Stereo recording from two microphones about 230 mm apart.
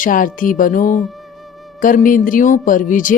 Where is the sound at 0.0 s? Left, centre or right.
Left.